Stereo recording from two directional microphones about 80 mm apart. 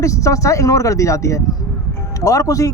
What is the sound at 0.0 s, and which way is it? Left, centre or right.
Speech, left.